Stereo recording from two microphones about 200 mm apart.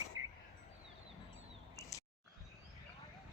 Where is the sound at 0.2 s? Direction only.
90° right.